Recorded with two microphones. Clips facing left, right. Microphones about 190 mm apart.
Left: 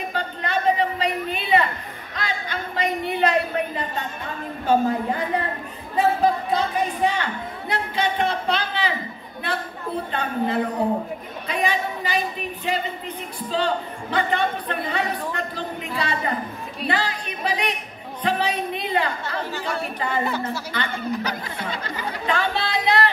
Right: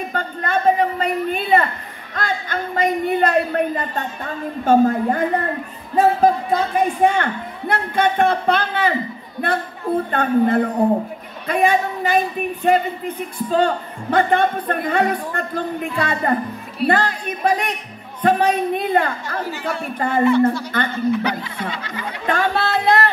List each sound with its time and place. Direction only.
0.1 s a sound: 50° right (ahead or behind)
2.1 s a man's voice: 50° right (ahead or behind)
10.1 s a man's voice: 50° right (ahead or behind)
21.1 s music: 40° left (ahead or behind)
22.2 s speech: 45° right (ahead or behind)